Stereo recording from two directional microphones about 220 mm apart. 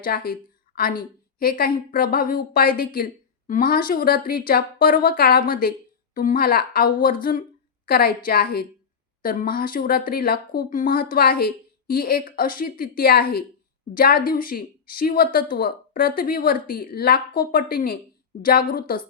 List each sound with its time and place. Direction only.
0.0 s a woman's voice: 40° left (ahead or behind)